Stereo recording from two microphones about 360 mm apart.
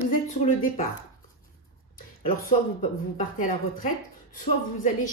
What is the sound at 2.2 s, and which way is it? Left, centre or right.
A woman's voice, left.